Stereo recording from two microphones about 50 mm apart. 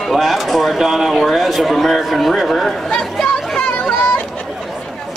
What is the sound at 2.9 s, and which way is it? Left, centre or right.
Chatter, centre.